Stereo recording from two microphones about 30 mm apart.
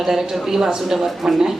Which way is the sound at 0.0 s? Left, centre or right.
Centre.